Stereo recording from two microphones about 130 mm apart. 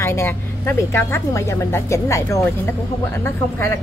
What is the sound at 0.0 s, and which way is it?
Speech, 20° left (ahead or behind).